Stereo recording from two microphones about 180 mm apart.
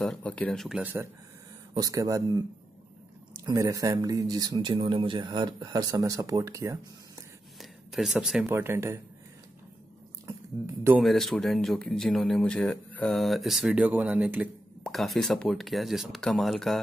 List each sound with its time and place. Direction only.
0.0 s speech: 5° left (ahead or behind)
1.7 s speech: 20° right (ahead or behind)
3.4 s speech: 20° right (ahead or behind)
7.5 s a sound: centre (ahead or behind)
8.5 s speech: 15° right (ahead or behind)
10.2 s speech: 15° right (ahead or behind)
11.0 s speech: centre (ahead or behind)